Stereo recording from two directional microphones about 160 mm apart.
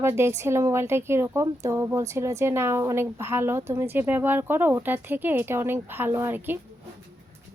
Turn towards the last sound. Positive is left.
turn(degrees=-15)  # may be behind; listen again after turning